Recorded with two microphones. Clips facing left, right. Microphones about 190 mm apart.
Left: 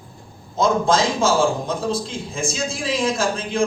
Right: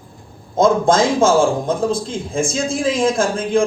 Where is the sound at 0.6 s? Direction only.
50° right (ahead or behind).